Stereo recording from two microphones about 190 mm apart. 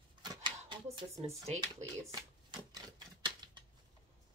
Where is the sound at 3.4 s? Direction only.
25° right (ahead or behind).